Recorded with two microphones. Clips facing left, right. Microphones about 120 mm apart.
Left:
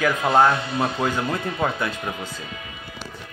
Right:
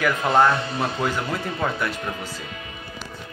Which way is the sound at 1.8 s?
20° left (ahead or behind).